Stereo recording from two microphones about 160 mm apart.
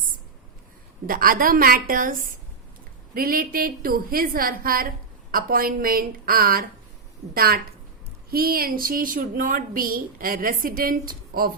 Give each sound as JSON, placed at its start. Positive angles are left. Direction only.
{"t": 1.0, "sound": "a woman's voice", "side_deg": -65}
{"t": 3.2, "sound": "a woman's voice", "side_deg": -65}